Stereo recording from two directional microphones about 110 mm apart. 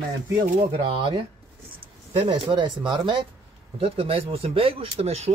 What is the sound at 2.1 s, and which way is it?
Speech, 55° right (ahead or behind).